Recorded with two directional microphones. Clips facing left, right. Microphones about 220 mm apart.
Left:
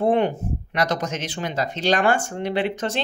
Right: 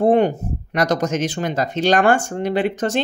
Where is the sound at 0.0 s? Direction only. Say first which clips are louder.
Right 4 dB; 40° right (ahead or behind).